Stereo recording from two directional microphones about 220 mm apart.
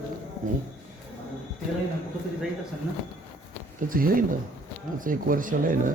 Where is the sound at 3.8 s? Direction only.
40° right (ahead or behind).